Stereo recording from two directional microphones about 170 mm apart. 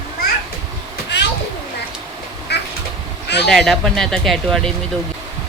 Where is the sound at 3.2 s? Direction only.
80° left.